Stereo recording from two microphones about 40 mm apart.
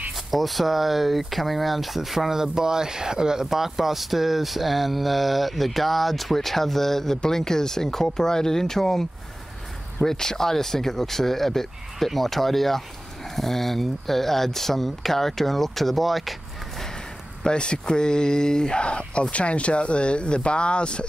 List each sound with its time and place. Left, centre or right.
0.3 s speech: centre
10.0 s speech: centre
17.4 s speech: left